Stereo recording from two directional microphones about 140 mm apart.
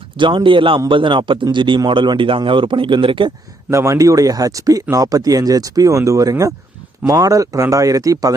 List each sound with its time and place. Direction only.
0.2 s speech: 35° right (ahead or behind)
3.7 s speech: 20° right (ahead or behind)